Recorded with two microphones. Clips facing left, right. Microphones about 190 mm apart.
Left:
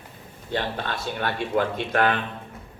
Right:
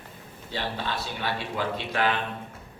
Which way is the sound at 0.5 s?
55° left (ahead or behind).